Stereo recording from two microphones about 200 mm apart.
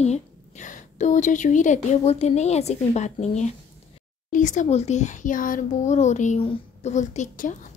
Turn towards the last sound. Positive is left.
turn(degrees=40)  # may be behind; listen again after turning